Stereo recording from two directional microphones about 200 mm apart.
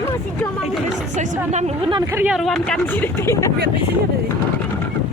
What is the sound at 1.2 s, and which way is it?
Speech, 35° right (ahead or behind).